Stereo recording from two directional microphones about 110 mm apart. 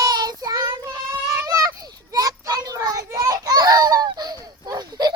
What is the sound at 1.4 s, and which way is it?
Children playing, 35° right (ahead or behind).